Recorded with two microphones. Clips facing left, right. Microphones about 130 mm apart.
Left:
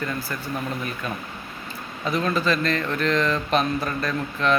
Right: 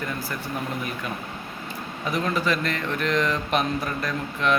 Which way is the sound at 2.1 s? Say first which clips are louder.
Left 2 dB; 15° right (ahead or behind).